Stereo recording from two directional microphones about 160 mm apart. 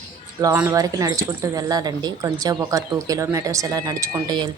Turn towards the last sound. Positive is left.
turn(degrees=-25)  # may be behind; listen again after turning